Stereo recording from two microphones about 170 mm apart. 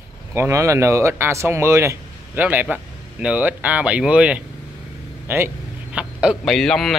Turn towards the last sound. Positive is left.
turn(degrees=0)  # may be behind; listen again after turning